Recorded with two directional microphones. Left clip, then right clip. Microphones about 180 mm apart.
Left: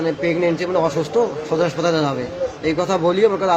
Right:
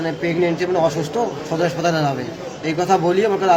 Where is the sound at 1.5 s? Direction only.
5° left (ahead or behind).